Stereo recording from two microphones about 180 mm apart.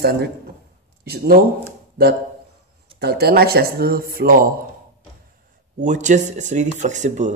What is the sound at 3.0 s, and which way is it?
Speech, 60° right (ahead or behind).